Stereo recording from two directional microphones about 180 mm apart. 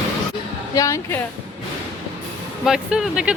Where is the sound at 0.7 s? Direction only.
20° left (ahead or behind).